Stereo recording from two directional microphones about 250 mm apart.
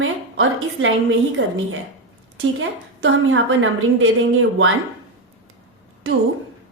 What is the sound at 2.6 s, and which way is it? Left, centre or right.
A woman's voice, right.